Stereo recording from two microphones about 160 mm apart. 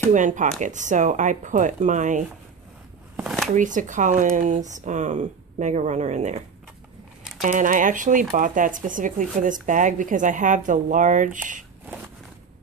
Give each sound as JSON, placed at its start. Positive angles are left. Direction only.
{"t": 0.1, "sound": "speech", "side_deg": -50}
{"t": 3.5, "sound": "speech", "side_deg": -50}
{"t": 7.4, "sound": "speech", "side_deg": -50}